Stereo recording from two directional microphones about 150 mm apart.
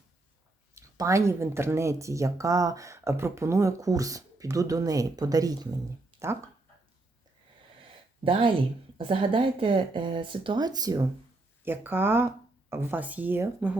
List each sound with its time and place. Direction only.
0.8 s speech: 20° right (ahead or behind)
8.2 s speech: 35° right (ahead or behind)
11.6 s speech: 15° right (ahead or behind)